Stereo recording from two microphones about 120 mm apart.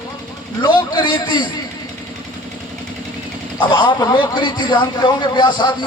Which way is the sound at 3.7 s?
40° left (ahead or behind).